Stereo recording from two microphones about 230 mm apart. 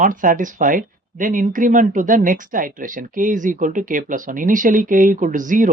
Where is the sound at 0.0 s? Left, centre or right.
Right.